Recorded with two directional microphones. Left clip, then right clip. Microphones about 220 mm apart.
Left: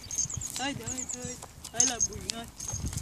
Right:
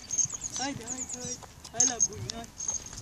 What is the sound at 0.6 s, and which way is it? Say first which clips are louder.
Speech: left 1 dB; centre (ahead or behind).